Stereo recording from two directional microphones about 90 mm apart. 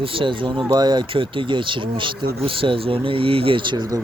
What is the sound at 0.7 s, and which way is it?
Speech, 55° right (ahead or behind).